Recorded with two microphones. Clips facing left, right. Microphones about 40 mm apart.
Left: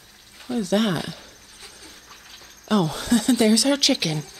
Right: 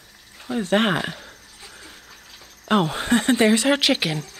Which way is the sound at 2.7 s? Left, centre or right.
Right.